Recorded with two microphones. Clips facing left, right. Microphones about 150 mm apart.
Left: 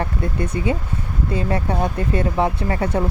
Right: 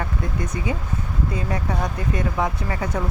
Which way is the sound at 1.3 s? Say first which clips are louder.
Left 6 dB; 30° left (ahead or behind).